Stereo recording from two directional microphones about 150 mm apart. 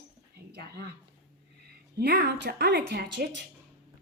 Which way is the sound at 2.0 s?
90° right.